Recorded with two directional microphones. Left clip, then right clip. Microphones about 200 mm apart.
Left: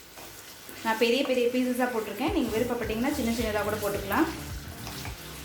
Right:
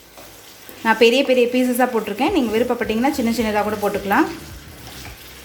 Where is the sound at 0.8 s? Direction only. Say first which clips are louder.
Right 11 dB; 50° right (ahead or behind).